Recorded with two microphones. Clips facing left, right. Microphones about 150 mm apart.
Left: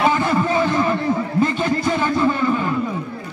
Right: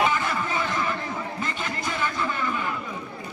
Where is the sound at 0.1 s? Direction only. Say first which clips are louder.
Left 8 dB; 35° left (ahead or behind).